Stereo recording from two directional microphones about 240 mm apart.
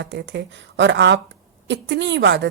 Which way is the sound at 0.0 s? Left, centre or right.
Right.